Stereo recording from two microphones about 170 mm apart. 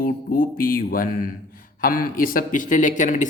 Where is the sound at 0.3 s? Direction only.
55° left (ahead or behind).